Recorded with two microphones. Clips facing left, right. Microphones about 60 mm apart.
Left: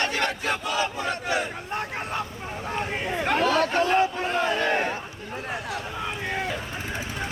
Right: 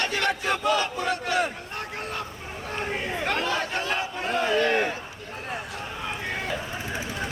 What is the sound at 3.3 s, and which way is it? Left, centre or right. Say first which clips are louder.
Speech: left 6 dB; centre.